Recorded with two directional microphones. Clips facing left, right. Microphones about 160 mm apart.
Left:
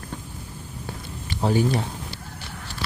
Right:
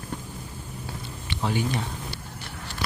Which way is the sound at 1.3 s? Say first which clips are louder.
Left 5 dB; 40° left (ahead or behind).